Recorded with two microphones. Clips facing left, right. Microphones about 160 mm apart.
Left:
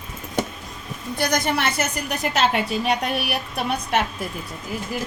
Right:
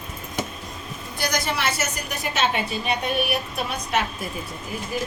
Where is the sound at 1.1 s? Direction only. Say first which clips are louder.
Left 4 dB; 60° left (ahead or behind).